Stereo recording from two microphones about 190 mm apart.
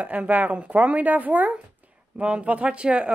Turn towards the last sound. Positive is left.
turn(degrees=-5)  # may be behind; listen again after turning